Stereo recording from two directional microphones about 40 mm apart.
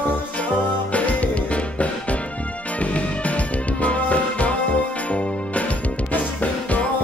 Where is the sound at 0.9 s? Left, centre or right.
Left.